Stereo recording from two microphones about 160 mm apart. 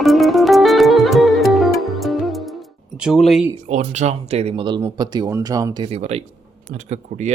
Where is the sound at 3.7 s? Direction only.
45° right (ahead or behind); by 5.8 s 25° right (ahead or behind).